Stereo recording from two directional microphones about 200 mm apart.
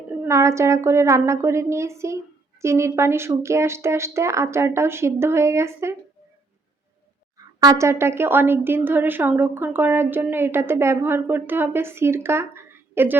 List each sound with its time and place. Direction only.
0.3 s a woman's voice: 15° right (ahead or behind)
7.6 s a woman's voice: 15° right (ahead or behind)